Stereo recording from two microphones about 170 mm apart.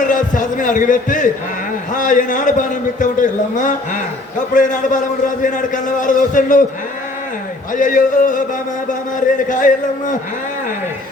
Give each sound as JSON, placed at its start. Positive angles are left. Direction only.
{"t": 0.1, "sound": "a man's voice", "side_deg": 50}
{"t": 7.7, "sound": "a man's voice", "side_deg": 50}